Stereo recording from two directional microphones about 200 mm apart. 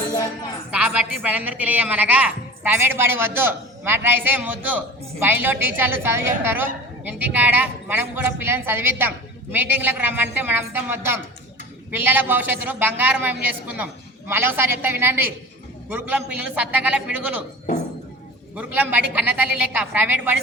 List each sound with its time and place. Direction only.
0.7 s a woman's voice: 5° right (ahead or behind)
18.5 s a woman's voice: 10° right (ahead or behind)